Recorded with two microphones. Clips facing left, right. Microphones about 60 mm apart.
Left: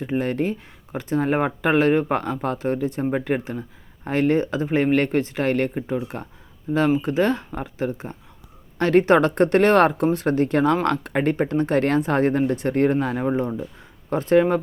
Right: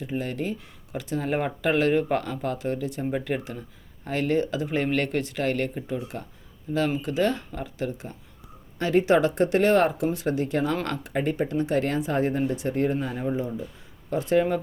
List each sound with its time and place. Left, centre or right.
0.0 s speech: left
8.8 s speech: left